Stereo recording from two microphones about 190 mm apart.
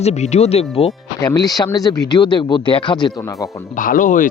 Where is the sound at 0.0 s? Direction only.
35° left (ahead or behind).